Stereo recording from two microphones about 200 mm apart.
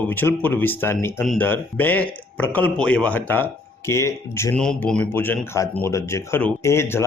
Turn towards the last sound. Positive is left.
turn(degrees=10)  # may be behind; listen again after turning